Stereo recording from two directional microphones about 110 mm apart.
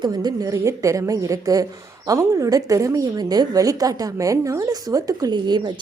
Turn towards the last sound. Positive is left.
turn(degrees=-40)  # may be behind; listen again after turning